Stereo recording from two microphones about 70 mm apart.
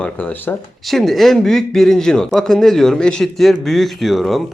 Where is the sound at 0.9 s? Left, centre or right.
Centre.